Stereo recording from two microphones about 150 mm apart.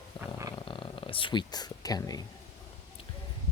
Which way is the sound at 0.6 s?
35° left (ahead or behind).